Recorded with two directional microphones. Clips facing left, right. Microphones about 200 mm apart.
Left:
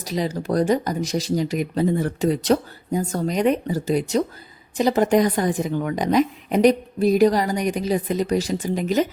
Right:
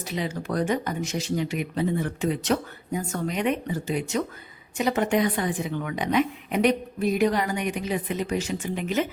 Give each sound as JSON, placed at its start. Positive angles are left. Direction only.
{"t": 0.0, "sound": "a woman's voice", "side_deg": 40}